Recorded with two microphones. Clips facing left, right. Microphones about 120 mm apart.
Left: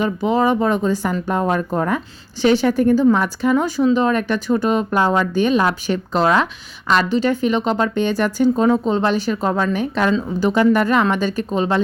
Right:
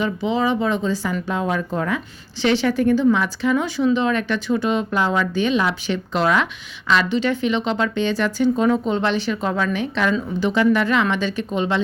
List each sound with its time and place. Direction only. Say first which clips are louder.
0.0 s speech: left 3 dB; 45° left (ahead or behind)
6.2 s speech: left 3 dB; 30° left (ahead or behind)
6.8 s speech: left 2 dB; 40° left (ahead or behind)
8.6 s speech: left 3 dB; 30° left (ahead or behind)